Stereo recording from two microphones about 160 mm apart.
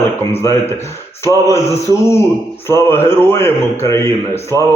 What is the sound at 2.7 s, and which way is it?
A man's voice, 15° left (ahead or behind).